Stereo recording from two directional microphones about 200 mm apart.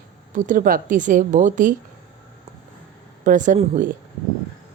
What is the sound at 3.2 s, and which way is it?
Speech, 40° right (ahead or behind).